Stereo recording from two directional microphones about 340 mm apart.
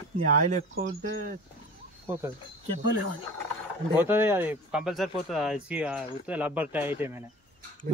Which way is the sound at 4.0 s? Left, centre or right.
Centre.